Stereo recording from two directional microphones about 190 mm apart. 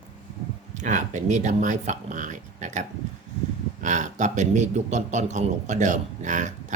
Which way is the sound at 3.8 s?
40° right (ahead or behind).